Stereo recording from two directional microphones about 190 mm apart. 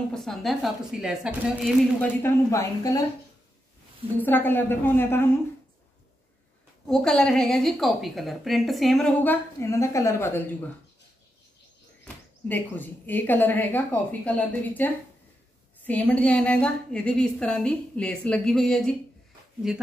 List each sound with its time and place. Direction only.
0.1 s a woman's voice: centre (ahead or behind)
2.0 s a woman's voice: 15° left (ahead or behind)
4.2 s a woman's voice: 10° left (ahead or behind)
6.9 s a woman's voice: 5° left (ahead or behind)
12.0 s a woman's voice: 10° left (ahead or behind)